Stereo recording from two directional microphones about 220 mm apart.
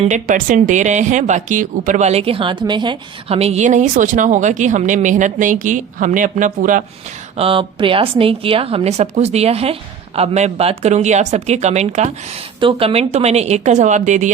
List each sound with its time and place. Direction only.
0.0 s speech: 35° right (ahead or behind)
7.3 s speech: 25° right (ahead or behind)